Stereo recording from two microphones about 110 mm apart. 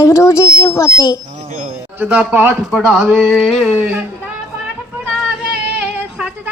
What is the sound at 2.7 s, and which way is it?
Speech, 5° right (ahead or behind).